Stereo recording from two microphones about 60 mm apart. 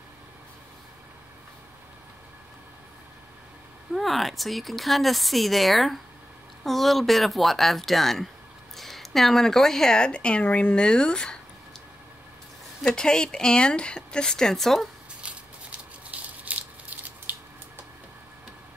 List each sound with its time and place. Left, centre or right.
3.9 s speech: centre
12.8 s speech: centre
15.2 s a sound: right